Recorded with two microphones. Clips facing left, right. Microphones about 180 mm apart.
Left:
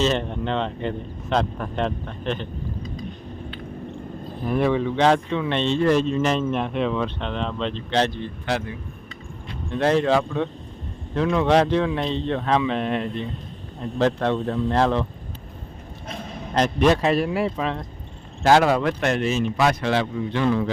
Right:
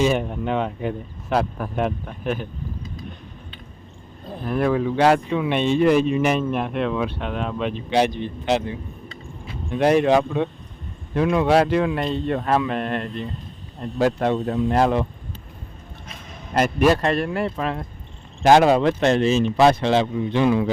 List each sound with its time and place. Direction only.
0.0 s speech: 10° right (ahead or behind)
4.4 s speech: centre (ahead or behind)
14.0 s speech: 10° right (ahead or behind)
16.6 s speech: 10° right (ahead or behind)
18.4 s a man's voice: 20° right (ahead or behind)